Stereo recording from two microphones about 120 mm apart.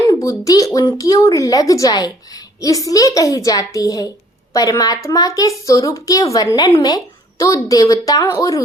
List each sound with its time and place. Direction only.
0.1 s a child's voice: 30° left (ahead or behind)